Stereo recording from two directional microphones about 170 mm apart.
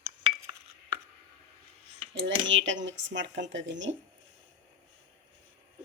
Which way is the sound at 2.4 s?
90° right.